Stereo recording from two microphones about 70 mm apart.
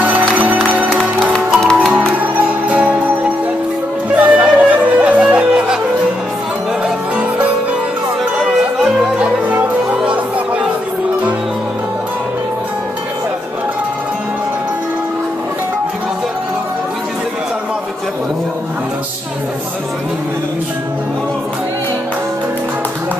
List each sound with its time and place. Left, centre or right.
0.0 s music: right
0.9 s music: centre
1.9 s music: right
4.1 s music: right
8.4 s music: centre
9.2 s music: right